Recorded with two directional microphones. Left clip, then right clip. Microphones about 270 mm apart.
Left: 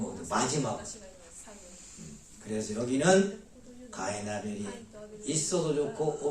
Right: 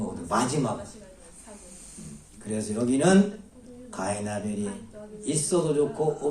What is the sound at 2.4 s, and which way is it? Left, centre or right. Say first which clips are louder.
A man's voice: right 5 dB; right.